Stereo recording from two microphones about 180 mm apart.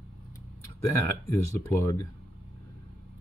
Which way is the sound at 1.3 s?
15° left (ahead or behind).